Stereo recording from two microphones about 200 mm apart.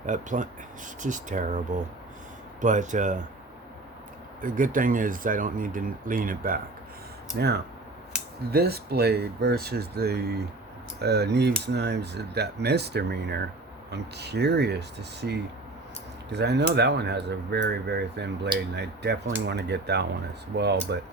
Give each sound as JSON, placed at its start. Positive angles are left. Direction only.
{"t": 0.0, "sound": "speech", "side_deg": -40}
{"t": 4.4, "sound": "speech", "side_deg": -45}
{"t": 7.3, "sound": "speech", "side_deg": -55}